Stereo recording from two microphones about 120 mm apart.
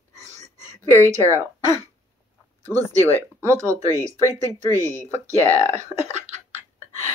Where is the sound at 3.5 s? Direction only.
25° right (ahead or behind).